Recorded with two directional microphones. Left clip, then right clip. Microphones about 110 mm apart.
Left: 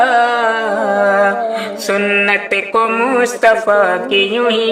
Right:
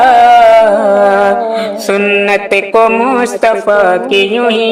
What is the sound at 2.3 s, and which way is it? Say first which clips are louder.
Speech: right 5 dB; 35° right (ahead or behind).